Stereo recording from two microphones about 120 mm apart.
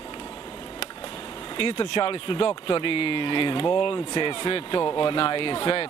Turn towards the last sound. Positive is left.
turn(degrees=45)  # may be behind; listen again after turning